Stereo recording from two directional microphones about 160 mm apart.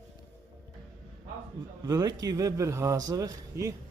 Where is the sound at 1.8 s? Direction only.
20° right (ahead or behind).